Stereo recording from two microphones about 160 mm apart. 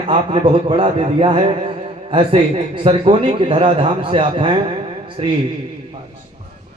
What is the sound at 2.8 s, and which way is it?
Speech, 35° right (ahead or behind).